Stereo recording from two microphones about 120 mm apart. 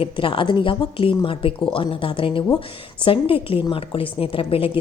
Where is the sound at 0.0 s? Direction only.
45° left (ahead or behind).